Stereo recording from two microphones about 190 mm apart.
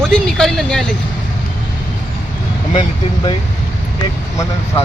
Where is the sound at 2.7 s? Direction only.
25° left (ahead or behind).